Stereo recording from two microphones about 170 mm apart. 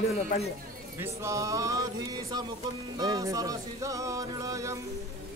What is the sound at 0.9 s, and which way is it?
Music, 15° right (ahead or behind).